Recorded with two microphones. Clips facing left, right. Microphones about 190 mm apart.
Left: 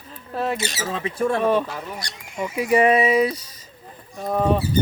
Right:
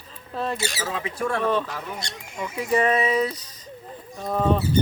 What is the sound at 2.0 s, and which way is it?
Horse, 25° right (ahead or behind).